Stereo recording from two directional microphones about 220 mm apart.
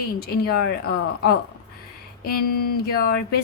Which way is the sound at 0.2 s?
45° left (ahead or behind).